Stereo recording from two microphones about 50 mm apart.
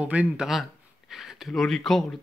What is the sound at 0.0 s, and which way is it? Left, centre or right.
Speech, right.